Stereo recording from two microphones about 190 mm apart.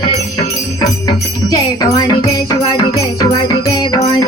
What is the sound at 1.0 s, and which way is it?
Jingle bell, 20° left (ahead or behind).